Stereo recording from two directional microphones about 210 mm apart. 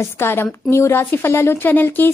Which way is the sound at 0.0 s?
10° left (ahead or behind).